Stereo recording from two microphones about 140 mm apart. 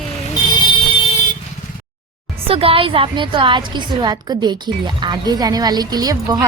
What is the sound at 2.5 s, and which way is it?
A woman's voice, 40° right (ahead or behind).